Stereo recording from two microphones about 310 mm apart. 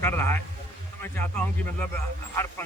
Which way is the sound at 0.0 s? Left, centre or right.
Centre.